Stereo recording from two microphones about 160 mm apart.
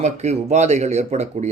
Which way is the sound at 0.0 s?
45° right (ahead or behind).